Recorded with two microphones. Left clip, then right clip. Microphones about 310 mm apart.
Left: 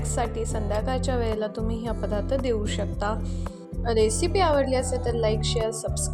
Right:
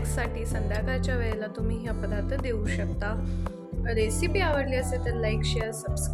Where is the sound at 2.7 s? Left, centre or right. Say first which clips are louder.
Left 4 dB; centre.